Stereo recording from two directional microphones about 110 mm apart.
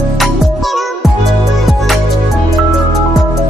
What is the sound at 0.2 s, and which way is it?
Music, centre (ahead or behind).